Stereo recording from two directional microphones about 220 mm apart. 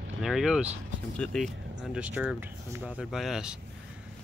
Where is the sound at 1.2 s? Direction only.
Centre (ahead or behind).